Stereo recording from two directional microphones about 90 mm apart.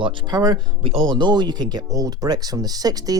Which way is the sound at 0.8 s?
75° right (ahead or behind).